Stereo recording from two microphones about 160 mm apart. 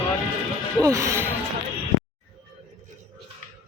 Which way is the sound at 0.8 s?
20° right (ahead or behind).